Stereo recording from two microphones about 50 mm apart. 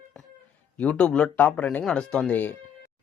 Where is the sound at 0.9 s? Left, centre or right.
Centre.